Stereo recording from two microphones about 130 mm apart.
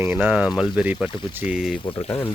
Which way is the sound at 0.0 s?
15° right (ahead or behind).